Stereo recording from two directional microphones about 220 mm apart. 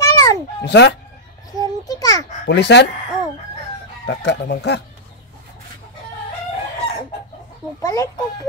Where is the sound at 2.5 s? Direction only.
50° left (ahead or behind).